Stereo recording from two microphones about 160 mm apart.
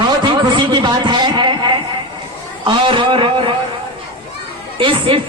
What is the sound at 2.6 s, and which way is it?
Speech, 30° right (ahead or behind).